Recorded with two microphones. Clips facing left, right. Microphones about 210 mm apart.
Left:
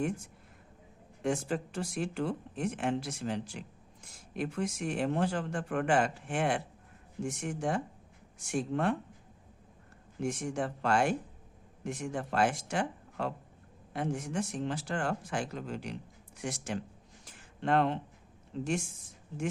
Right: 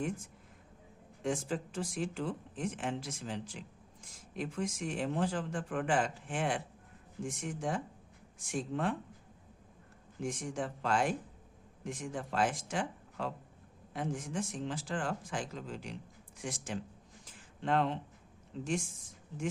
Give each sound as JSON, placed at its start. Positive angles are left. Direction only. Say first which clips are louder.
{"t": 1.2, "sound": "speech", "louder": "left 3 dB", "side_deg": 65}
{"t": 10.2, "sound": "speech", "louder": "left 4 dB", "side_deg": 65}
{"t": 17.2, "sound": "a sound", "louder": "left 3 dB", "side_deg": 65}
{"t": 18.6, "sound": "speech", "louder": "left 2 dB", "side_deg": 65}